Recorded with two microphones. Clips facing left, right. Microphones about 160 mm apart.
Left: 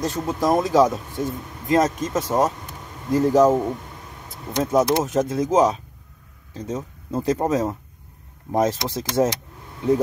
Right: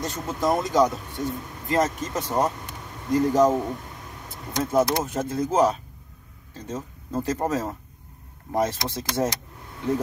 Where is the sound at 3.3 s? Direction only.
20° left (ahead or behind).